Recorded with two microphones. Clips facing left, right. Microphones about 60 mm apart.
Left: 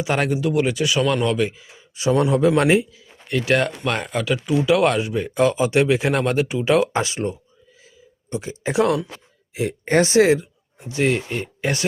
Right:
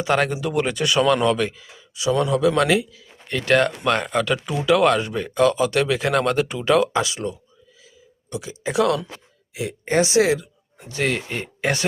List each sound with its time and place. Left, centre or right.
0.0 s speech: centre
2.0 s speech: left
3.2 s speech: centre
6.9 s speech: left
10.8 s speech: centre
11.6 s speech: right